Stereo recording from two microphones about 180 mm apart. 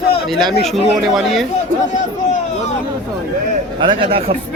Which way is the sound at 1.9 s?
45° left (ahead or behind).